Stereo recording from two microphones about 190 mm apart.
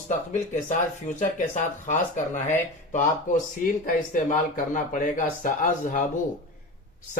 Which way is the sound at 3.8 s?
45° left (ahead or behind).